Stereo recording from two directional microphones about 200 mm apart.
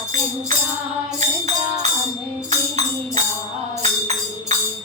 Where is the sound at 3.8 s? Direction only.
35° right (ahead or behind).